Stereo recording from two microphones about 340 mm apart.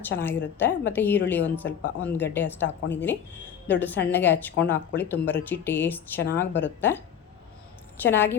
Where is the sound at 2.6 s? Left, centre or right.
Left.